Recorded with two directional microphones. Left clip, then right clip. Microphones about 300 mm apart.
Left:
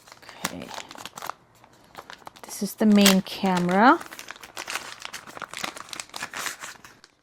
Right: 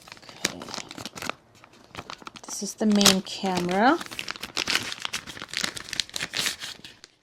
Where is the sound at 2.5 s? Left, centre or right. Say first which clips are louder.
Left 3 dB; left.